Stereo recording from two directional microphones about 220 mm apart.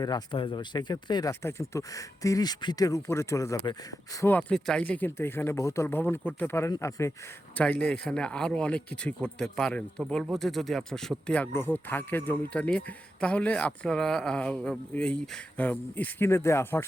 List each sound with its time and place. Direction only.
0.0 s speech: 20° left (ahead or behind)